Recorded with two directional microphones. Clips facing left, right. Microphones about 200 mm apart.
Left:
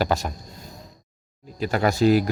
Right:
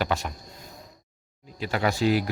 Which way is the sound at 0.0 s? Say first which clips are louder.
Left 4 dB; 40° left (ahead or behind).